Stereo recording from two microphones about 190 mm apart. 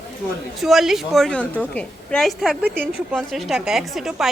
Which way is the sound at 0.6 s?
Centre (ahead or behind).